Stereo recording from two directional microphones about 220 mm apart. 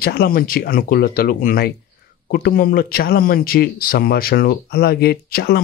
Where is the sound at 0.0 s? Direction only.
45° left (ahead or behind).